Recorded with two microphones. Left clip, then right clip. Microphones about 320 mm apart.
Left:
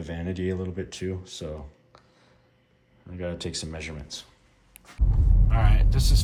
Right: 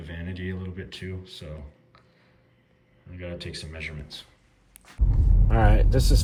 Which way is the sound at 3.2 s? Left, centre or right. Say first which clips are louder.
Left 4 dB; centre.